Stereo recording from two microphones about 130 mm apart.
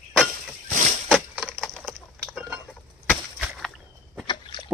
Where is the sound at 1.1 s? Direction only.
Centre (ahead or behind).